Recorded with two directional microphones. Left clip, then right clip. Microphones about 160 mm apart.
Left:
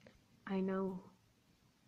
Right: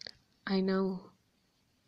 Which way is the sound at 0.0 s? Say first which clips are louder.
Right 11 dB; 40° right (ahead or behind).